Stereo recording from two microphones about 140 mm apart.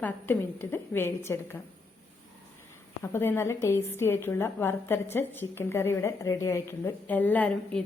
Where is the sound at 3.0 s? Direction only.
15° left (ahead or behind).